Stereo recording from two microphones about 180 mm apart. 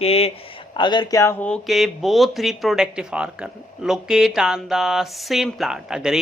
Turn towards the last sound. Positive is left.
turn(degrees=-5)  # may be behind; listen again after turning